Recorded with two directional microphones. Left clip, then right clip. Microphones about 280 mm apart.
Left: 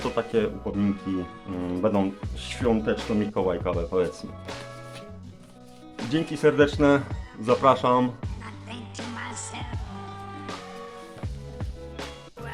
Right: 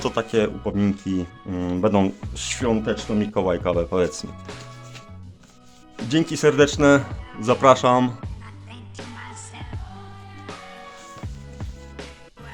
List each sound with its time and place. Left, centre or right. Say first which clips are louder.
0.1 s speech: right 1 dB; right
6.1 s speech: right 3 dB; right
8.7 s music: left 2 dB; centre
11.2 s music: even; centre